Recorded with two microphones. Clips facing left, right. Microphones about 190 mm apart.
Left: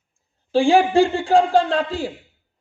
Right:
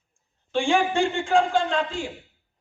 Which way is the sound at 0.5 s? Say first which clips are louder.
Left 7 dB; 35° left (ahead or behind).